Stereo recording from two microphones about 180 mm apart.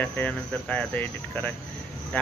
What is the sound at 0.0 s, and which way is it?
Speech, 10° left (ahead or behind).